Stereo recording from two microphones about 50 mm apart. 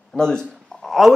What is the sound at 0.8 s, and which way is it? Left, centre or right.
Speech, centre.